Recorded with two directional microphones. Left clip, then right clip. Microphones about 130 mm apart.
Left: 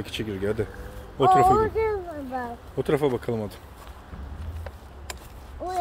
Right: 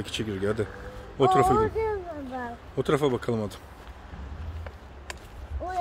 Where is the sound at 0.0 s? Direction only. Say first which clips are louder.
Even; 25° right (ahead or behind).